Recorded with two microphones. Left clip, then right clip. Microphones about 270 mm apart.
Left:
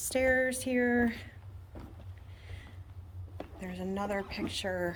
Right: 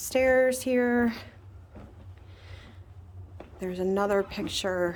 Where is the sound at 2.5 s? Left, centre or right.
Centre.